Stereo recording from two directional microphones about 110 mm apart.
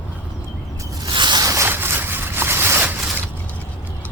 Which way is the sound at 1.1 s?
45° right (ahead or behind).